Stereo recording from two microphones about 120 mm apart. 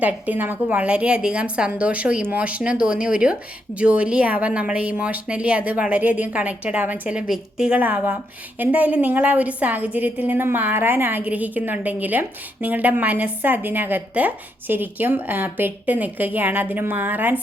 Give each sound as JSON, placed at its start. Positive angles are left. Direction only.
{"t": 0.0, "sound": "a woman's voice", "side_deg": -15}